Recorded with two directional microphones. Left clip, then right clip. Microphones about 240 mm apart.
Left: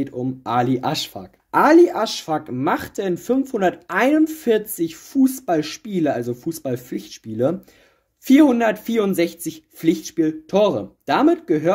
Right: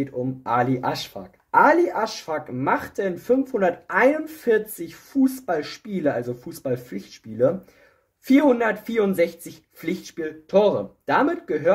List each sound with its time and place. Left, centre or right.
0.0 s speech: left